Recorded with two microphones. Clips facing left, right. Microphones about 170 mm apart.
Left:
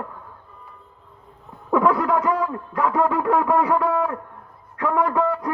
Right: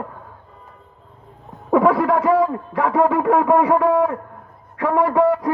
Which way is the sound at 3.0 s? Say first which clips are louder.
Right 4 dB; 10° right (ahead or behind).